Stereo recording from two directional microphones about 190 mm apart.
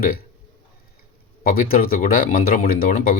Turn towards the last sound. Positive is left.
turn(degrees=50)  # may be behind; listen again after turning